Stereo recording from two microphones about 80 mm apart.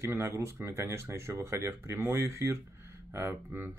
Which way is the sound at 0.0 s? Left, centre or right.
Right.